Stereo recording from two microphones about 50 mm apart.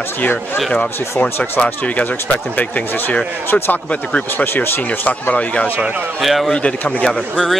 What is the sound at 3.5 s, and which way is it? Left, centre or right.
Speech, left.